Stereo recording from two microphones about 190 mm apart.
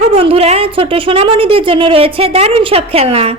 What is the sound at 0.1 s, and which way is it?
A woman's voice, 30° right (ahead or behind).